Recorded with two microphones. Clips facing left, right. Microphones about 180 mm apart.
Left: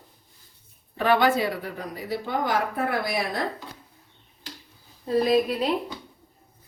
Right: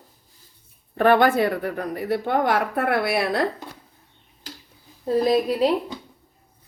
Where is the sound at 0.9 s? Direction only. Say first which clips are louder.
Right 4 dB; 55° right (ahead or behind); by 3.5 s 70° right (ahead or behind).